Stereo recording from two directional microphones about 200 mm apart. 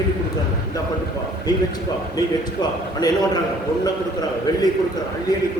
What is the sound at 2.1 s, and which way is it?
Speech, 20° left (ahead or behind).